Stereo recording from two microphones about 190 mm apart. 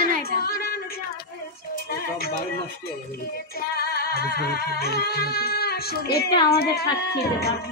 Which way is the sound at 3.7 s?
55° left (ahead or behind).